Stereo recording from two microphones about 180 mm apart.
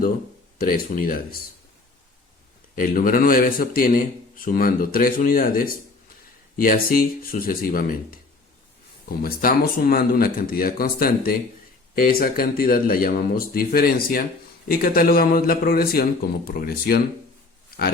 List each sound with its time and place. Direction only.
0.6 s a man's voice: 50° left (ahead or behind)
2.7 s a man's voice: 50° left (ahead or behind)
9.0 s speech: 55° left (ahead or behind)